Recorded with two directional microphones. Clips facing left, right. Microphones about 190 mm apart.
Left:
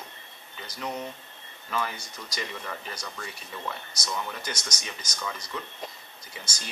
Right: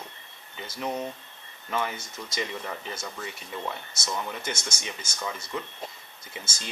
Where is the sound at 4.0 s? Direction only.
25° right (ahead or behind).